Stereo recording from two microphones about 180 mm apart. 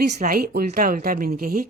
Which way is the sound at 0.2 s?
55° right (ahead or behind).